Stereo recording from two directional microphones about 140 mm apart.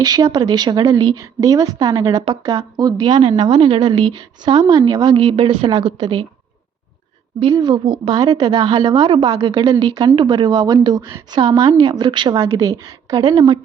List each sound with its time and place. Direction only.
0.0 s a woman's voice: 25° right (ahead or behind)
7.5 s a woman's voice: 30° right (ahead or behind)
12.4 s a woman's voice: 20° right (ahead or behind)